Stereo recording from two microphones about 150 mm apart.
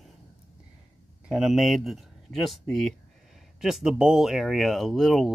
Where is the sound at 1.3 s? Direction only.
Centre (ahead or behind).